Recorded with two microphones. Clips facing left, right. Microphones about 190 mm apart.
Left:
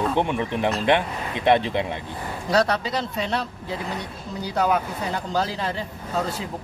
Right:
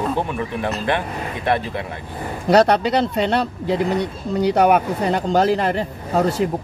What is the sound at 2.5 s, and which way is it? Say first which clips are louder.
Speech: right 7 dB; 70° right (ahead or behind).